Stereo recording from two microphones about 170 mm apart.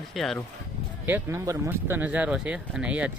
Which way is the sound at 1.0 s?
15° right (ahead or behind).